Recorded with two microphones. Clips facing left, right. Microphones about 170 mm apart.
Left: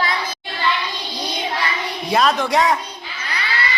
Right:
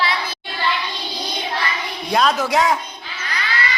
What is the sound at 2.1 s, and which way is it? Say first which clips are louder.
Speech: even; centre (ahead or behind).